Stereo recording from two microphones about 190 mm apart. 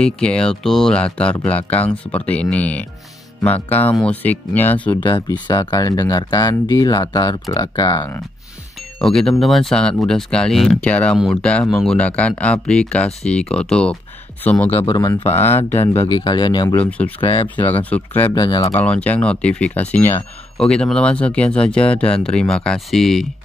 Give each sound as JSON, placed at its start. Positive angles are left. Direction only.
{"t": 0.0, "sound": "speech", "side_deg": 5}
{"t": 5.0, "sound": "speech", "side_deg": 25}
{"t": 9.0, "sound": "speech", "side_deg": 5}
{"t": 14.7, "sound": "speech", "side_deg": 25}
{"t": 15.8, "sound": "speech", "side_deg": 30}
{"t": 17.8, "sound": "speech", "side_deg": 10}
{"t": 18.3, "sound": "speech", "side_deg": 25}
{"t": 18.7, "sound": "speech", "side_deg": 5}